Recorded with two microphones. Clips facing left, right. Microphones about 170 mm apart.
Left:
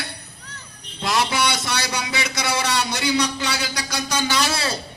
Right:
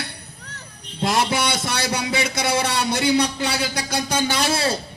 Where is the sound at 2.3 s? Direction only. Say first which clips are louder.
Right 2 dB; 55° right (ahead or behind).